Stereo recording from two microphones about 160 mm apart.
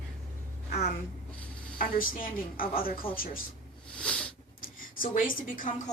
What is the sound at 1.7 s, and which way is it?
A woman's voice, 60° left (ahead or behind).